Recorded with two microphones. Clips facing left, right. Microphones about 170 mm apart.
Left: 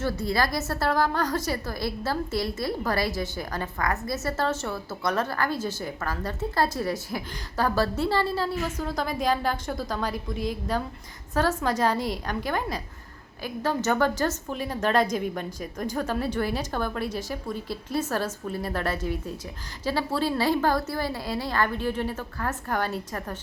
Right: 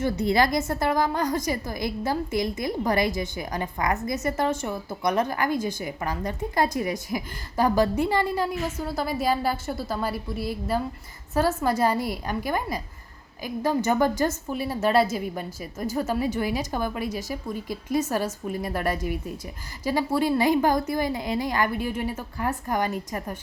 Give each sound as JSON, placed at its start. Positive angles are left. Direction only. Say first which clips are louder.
{"t": 0.0, "sound": "a woman's voice", "louder": "right 4 dB", "side_deg": -20}